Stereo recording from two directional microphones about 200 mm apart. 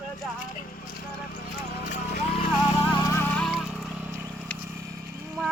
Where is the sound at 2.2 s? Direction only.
30° left (ahead or behind).